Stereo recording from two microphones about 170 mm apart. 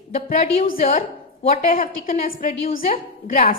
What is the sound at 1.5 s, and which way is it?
A woman's voice, 50° left (ahead or behind).